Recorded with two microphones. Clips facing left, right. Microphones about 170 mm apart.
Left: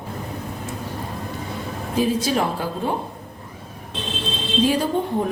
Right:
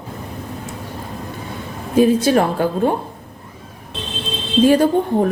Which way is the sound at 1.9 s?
60° right (ahead or behind).